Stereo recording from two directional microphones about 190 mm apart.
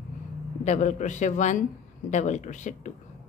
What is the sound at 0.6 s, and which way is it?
A woman's voice, 40° left (ahead or behind).